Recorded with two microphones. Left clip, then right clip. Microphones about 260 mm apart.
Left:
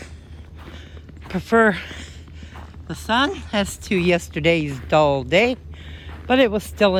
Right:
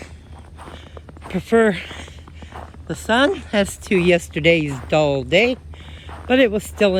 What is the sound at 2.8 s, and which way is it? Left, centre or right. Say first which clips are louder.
Speech: right 3 dB; centre.